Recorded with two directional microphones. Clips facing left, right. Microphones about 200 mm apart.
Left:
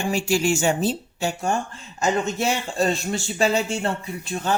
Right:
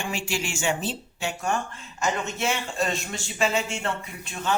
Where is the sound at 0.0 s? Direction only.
40° left (ahead or behind).